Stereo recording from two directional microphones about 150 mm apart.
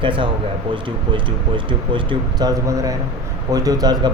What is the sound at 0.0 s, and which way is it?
Speech, 35° right (ahead or behind).